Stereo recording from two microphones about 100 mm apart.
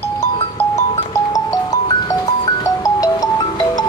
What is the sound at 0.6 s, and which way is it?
Music, 30° left (ahead or behind).